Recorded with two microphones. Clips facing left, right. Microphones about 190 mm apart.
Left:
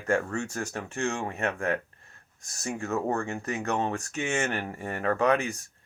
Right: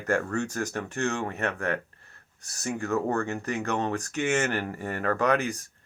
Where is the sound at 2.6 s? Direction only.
30° left (ahead or behind).